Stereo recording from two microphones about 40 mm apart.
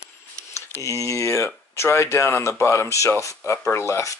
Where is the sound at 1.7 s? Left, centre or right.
Left.